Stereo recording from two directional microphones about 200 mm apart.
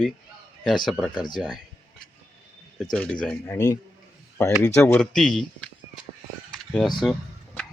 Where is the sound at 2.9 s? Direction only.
5° left (ahead or behind).